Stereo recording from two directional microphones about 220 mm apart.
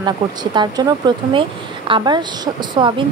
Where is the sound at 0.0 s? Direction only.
20° right (ahead or behind).